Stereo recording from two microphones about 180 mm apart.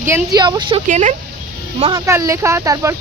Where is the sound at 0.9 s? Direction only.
40° right (ahead or behind).